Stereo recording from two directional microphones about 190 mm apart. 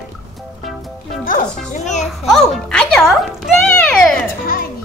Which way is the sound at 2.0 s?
Centre (ahead or behind).